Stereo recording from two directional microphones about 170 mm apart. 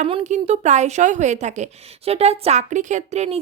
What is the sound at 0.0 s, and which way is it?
A woman's voice, 35° right (ahead or behind).